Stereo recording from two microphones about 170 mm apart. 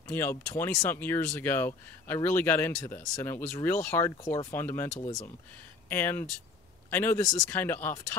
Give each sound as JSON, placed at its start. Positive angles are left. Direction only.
{"t": 0.1, "sound": "speech", "side_deg": 15}